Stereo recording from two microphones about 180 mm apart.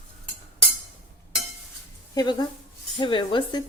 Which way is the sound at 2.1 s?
25° left (ahead or behind).